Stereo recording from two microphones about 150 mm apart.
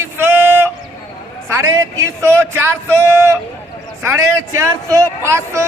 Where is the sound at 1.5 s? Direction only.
20° right (ahead or behind).